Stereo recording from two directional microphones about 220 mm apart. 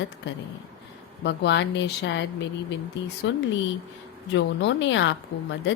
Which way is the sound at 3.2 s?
55° left (ahead or behind).